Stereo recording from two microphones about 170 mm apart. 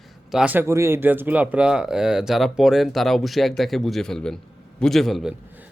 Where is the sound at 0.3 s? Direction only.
5° right (ahead or behind).